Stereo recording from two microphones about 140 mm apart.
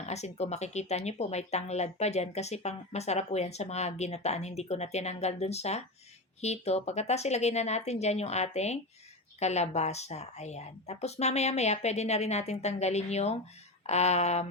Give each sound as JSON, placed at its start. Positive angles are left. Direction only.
{"t": 0.0, "sound": "speech", "side_deg": 50}